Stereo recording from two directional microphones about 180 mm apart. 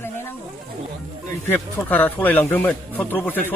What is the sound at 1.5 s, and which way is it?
Speech, 10° left (ahead or behind).